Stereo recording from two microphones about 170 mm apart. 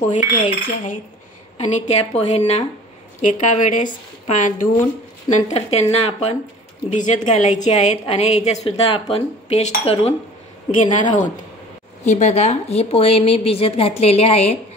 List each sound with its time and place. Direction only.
0.1 s a woman's voice: 45° left (ahead or behind)
5.3 s a woman's voice: 40° left (ahead or behind)